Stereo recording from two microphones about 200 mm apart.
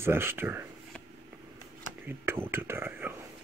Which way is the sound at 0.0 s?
10° right (ahead or behind).